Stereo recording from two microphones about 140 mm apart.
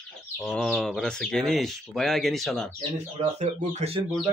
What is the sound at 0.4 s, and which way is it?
Speech, 5° left (ahead or behind).